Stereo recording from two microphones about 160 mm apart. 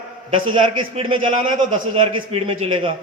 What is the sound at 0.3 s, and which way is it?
A man's voice, 35° right (ahead or behind).